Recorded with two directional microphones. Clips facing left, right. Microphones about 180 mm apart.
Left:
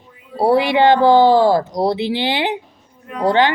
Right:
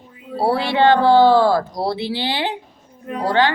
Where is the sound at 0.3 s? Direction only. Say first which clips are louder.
Left 4 dB; 15° left (ahead or behind).